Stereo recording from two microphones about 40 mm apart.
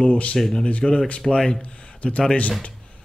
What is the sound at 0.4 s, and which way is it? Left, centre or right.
A man's voice, centre.